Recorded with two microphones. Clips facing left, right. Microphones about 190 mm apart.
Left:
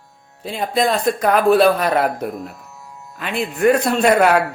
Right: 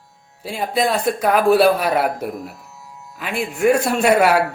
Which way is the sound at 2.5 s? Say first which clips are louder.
Left 2 dB; 55° left (ahead or behind).